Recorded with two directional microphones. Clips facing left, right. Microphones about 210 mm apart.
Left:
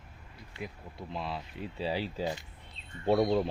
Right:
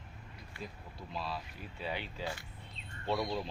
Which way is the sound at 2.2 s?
20° left (ahead or behind).